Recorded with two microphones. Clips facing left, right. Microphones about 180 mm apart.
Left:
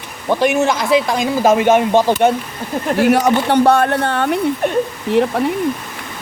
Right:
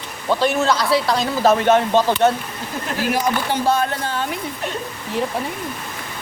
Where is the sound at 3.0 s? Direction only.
70° left (ahead or behind).